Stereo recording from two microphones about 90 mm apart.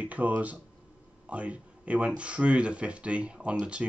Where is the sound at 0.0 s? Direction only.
15° right (ahead or behind).